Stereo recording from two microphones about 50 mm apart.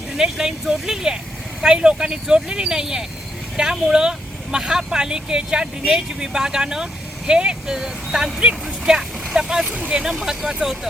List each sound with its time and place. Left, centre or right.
0.2 s speech: centre
9.6 s speech: right
10.6 s speech: centre